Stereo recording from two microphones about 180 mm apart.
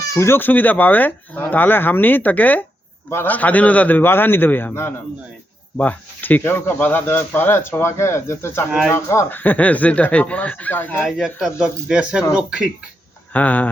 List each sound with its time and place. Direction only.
0.0 s speech: 15° left (ahead or behind)
11.2 s speech: centre (ahead or behind)
13.3 s speech: 10° left (ahead or behind)